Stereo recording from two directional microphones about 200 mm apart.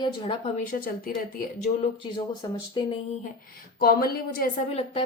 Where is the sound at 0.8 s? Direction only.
45° left (ahead or behind).